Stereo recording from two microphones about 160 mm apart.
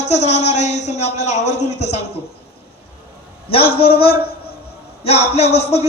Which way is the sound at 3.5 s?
35° left (ahead or behind).